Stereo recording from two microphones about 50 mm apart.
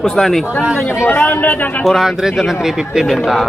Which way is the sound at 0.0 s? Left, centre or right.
Centre.